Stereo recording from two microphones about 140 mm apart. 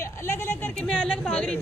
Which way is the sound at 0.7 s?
5° left (ahead or behind).